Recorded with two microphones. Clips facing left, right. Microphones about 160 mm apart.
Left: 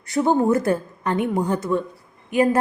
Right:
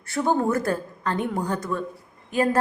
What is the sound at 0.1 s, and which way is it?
A woman's voice, 20° left (ahead or behind).